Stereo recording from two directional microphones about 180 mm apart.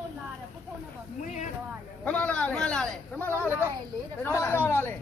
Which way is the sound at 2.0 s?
10° left (ahead or behind).